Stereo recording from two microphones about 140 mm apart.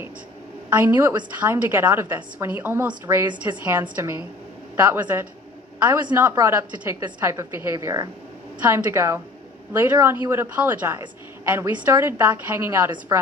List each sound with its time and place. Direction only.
0.7 s a woman's voice: 15° right (ahead or behind)
6.3 s a woman's voice: 15° right (ahead or behind)